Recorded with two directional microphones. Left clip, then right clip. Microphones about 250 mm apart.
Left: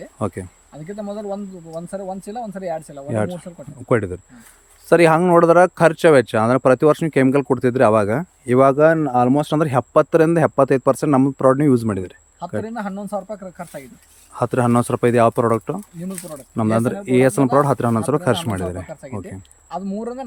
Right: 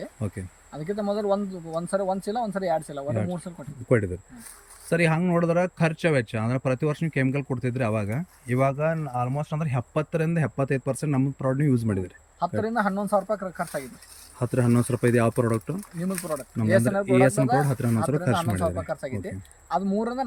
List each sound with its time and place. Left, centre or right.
0.0 s speech: centre
3.1 s speech: centre